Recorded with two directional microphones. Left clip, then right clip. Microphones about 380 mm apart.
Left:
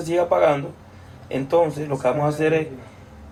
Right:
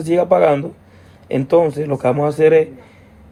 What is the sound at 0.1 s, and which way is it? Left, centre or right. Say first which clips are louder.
Speech: right 5 dB; centre.